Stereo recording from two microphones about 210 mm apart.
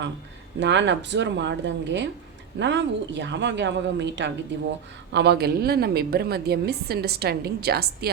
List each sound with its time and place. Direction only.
0.6 s a woman's voice: 55° right (ahead or behind)